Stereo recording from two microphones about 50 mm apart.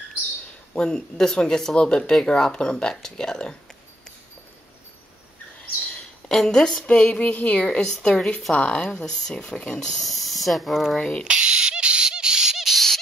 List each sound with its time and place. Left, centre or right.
0.7 s speech: centre
6.2 s a woman's voice: centre
6.9 s a woman's voice: centre
11.0 s speech: centre
11.2 s a sound: centre